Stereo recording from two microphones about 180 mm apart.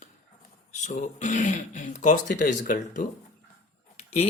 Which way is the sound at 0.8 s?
40° left (ahead or behind).